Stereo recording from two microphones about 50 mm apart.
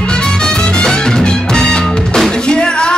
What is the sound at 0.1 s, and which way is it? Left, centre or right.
Music, centre.